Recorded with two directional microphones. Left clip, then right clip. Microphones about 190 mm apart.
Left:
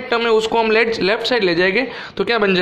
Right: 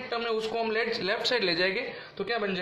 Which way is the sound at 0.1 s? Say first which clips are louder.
Left 15 dB; 40° left (ahead or behind).